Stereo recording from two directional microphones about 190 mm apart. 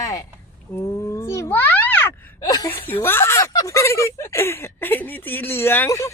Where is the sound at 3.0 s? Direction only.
15° left (ahead or behind).